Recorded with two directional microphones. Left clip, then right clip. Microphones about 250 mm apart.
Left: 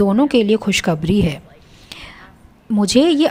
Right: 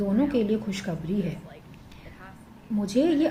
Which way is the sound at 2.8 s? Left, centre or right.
Left.